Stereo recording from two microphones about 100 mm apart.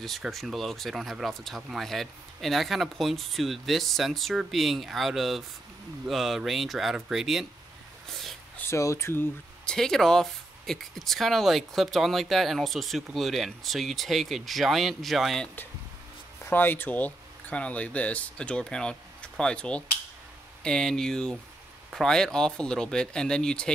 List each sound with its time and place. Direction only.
0.0 s speech: centre (ahead or behind)
8.1 s a sound: centre (ahead or behind)
8.5 s speech: 30° left (ahead or behind)
9.7 s speech: 5° left (ahead or behind)
15.4 s speech: 20° left (ahead or behind)